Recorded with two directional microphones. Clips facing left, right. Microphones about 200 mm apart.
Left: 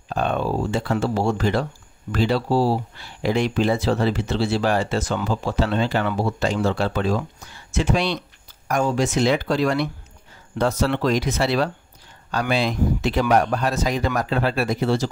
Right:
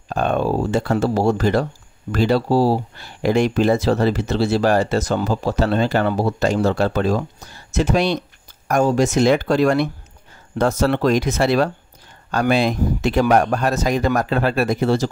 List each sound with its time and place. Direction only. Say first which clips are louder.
0.1 s speech: right 3 dB; 45° right (ahead or behind)